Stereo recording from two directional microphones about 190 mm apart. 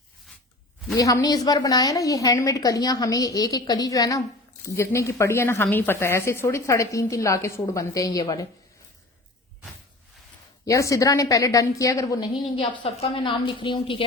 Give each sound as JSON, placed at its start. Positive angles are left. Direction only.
{"t": 0.9, "sound": "a woman's voice", "side_deg": 20}
{"t": 10.7, "sound": "a woman's voice", "side_deg": 15}